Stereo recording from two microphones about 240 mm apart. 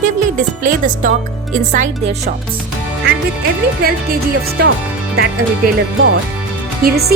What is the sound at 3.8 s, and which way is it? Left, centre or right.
Speech, right.